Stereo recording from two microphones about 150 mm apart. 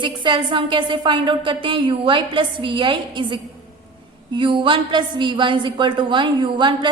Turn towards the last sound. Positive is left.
turn(degrees=-30)  # may be behind; listen again after turning